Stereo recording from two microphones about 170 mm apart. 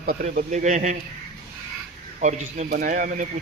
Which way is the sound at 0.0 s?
50° right (ahead or behind).